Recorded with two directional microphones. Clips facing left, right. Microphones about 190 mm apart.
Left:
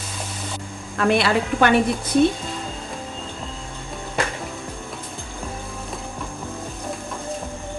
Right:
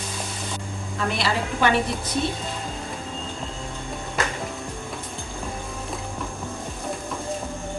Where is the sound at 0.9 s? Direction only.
60° left (ahead or behind).